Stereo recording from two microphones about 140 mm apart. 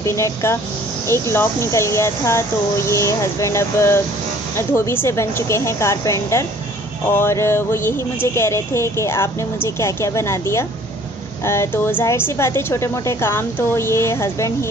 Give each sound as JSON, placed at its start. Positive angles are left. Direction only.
{"t": 0.0, "sound": "speech", "side_deg": 20}